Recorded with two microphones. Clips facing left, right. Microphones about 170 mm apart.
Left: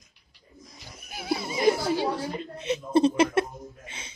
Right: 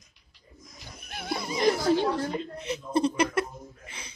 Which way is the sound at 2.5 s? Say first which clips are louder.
Left 9 dB; 20° left (ahead or behind).